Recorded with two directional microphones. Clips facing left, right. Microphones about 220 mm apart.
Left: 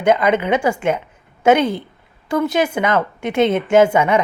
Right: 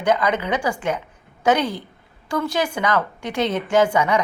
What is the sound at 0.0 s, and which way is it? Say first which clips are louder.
A woman's voice: left 5 dB; 25° left (ahead or behind).